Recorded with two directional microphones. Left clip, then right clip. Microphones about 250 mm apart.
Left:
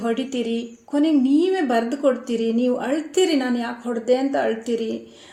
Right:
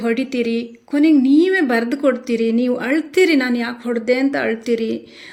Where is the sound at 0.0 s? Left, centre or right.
Right.